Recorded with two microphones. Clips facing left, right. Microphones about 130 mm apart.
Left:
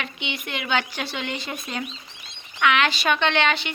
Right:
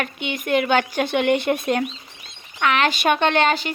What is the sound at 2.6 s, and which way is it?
Speech, 40° right (ahead or behind).